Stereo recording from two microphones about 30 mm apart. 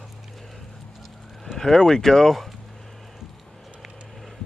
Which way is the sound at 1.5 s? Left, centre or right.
Left.